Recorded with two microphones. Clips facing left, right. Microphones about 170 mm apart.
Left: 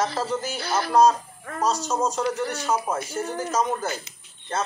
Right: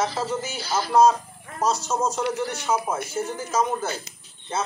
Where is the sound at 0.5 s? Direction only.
60° left (ahead or behind).